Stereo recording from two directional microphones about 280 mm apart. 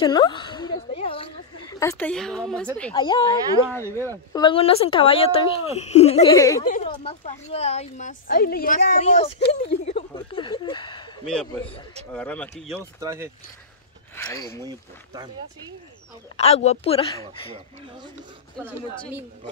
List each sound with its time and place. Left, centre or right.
0.0 s a woman's voice: centre
2.9 s speech: centre
6.3 s speech: centre
6.6 s speech: left
11.2 s speech: centre
13.0 s speech: centre
14.1 s speech: centre
14.6 s speech: centre
16.3 s speech: left